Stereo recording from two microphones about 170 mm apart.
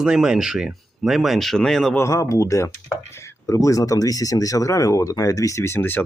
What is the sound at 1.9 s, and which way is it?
Speech, 15° left (ahead or behind).